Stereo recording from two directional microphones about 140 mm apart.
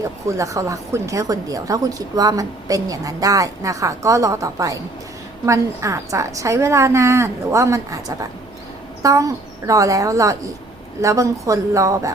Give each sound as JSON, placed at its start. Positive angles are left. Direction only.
{"t": 0.3, "sound": "a woman's voice", "side_deg": -20}